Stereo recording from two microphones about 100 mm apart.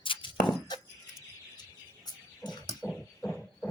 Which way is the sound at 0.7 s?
45° left (ahead or behind).